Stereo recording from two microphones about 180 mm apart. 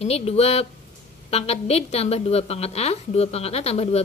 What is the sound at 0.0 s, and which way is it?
A woman's voice, 35° left (ahead or behind).